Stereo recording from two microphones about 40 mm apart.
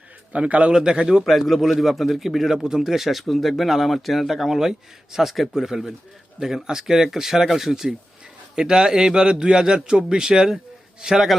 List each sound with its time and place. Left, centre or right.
0.3 s a man's voice: right
0.7 s a man's voice: centre
1.2 s a man's voice: centre